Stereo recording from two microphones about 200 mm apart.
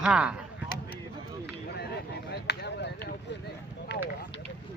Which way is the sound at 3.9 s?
65° left (ahead or behind).